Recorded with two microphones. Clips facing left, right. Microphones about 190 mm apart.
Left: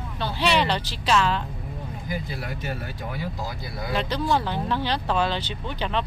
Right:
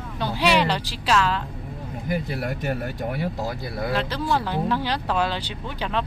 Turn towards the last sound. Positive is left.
turn(degrees=-5)  # may be behind; listen again after turning